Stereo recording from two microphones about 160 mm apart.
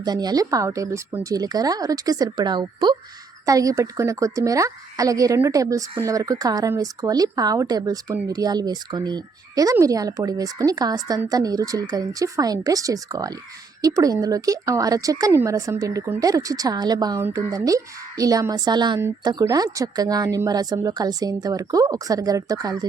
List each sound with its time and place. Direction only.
0.0 s speech: 25° right (ahead or behind)